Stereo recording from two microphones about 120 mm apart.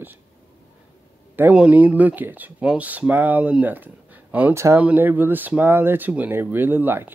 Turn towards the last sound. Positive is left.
turn(degrees=-15)  # may be behind; listen again after turning